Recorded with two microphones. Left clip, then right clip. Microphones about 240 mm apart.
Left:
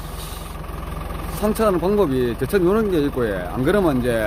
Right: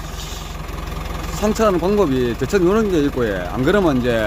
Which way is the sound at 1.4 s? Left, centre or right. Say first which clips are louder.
Right 2 dB; centre.